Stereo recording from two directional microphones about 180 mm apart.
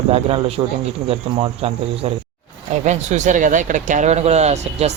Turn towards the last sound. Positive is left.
turn(degrees=-35)  # may be behind; listen again after turning